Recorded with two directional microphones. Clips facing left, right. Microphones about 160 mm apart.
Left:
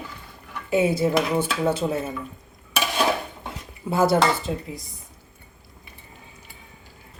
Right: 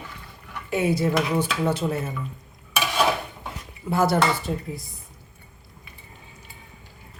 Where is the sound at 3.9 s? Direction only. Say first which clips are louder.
Left 2 dB; 25° left (ahead or behind).